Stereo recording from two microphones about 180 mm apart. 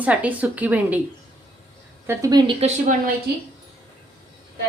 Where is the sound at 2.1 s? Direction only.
20° right (ahead or behind).